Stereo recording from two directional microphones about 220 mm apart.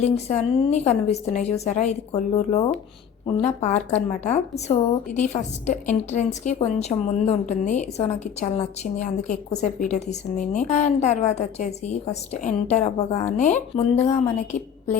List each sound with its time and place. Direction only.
0.0 s a woman's voice: 30° left (ahead or behind)